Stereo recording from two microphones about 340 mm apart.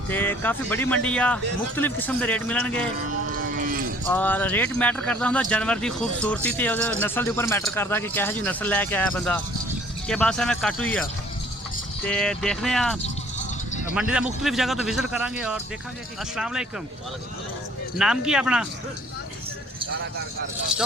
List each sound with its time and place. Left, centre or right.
0.1 s speech: centre
3.1 s cattle: right
4.1 s speech: centre
12.0 s speech: centre
17.9 s speech: centre
20.7 s speech: centre